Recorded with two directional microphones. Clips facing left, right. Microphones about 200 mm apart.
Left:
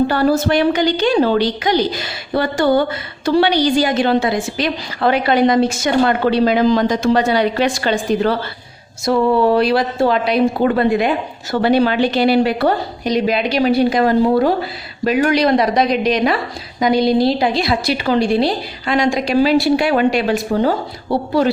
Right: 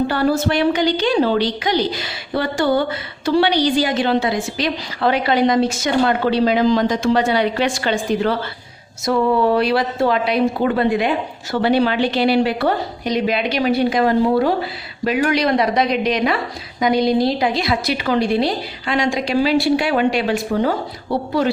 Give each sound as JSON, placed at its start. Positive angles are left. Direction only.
{"t": 0.1, "sound": "a woman's voice", "side_deg": 45}